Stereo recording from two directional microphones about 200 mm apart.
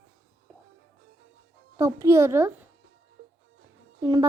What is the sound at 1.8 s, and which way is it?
Speech, 15° right (ahead or behind).